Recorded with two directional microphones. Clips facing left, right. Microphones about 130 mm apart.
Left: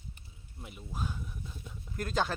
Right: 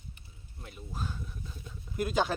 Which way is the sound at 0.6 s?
10° left (ahead or behind).